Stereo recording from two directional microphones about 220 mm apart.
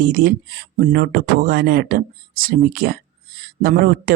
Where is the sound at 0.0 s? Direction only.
40° right (ahead or behind).